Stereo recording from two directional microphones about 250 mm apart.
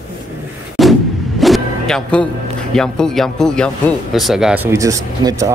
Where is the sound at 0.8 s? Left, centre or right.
Centre.